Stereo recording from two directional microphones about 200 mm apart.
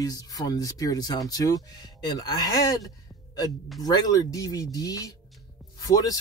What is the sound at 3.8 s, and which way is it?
Speech, 20° left (ahead or behind).